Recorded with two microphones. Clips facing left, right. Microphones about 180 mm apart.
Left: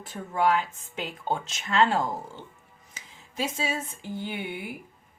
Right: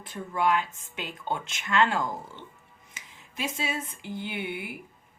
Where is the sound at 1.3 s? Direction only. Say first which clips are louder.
Even; 35° left (ahead or behind).